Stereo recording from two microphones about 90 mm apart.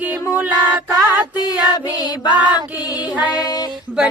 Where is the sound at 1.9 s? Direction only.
55° left (ahead or behind).